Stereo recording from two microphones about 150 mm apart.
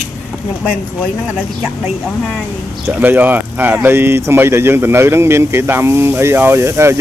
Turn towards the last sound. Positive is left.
turn(degrees=-15)  # may be behind; listen again after turning